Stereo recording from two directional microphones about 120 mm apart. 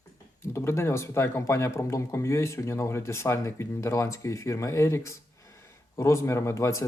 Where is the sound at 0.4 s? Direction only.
20° left (ahead or behind).